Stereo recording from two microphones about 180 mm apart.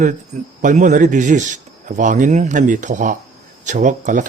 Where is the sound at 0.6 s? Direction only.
45° right (ahead or behind).